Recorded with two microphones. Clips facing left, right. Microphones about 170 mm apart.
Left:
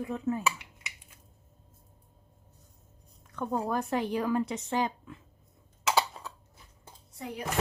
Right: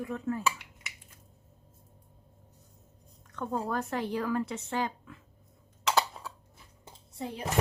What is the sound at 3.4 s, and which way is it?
Speech, 15° left (ahead or behind).